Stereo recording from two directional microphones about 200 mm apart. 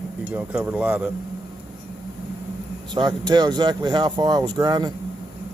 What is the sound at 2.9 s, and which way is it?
Speech, 20° right (ahead or behind).